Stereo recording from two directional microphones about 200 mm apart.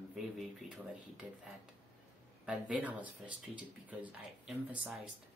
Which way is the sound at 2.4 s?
5° right (ahead or behind).